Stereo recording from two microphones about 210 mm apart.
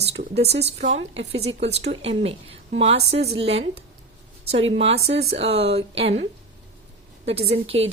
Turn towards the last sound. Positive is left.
turn(degrees=-30)  # may be behind; listen again after turning